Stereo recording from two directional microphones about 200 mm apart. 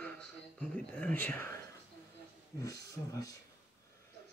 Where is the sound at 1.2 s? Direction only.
10° left (ahead or behind).